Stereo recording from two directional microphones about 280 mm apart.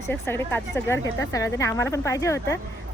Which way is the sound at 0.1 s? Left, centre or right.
Centre.